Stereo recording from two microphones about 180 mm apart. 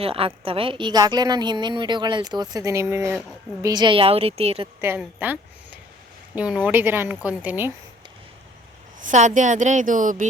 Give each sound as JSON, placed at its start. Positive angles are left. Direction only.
{"t": 0.0, "sound": "a woman's voice", "side_deg": -30}
{"t": 4.8, "sound": "speech", "side_deg": -10}
{"t": 9.0, "sound": "speech", "side_deg": -45}